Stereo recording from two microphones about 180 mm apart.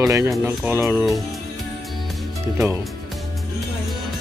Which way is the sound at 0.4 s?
10° right (ahead or behind).